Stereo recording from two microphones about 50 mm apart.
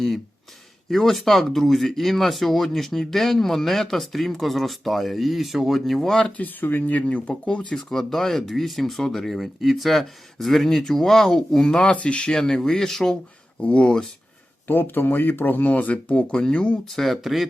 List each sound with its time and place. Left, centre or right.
0.9 s speech: centre
6.3 s speech: left
7.0 s speech: left
7.8 s speech: centre
13.6 s speech: left
14.7 s speech: left
16.3 s speech: centre
16.9 s speech: centre